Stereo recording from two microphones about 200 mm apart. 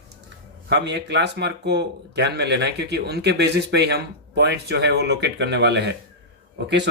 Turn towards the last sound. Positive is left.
turn(degrees=-60)  # may be behind; listen again after turning